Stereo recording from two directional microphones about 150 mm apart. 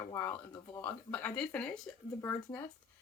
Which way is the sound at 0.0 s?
20° left (ahead or behind).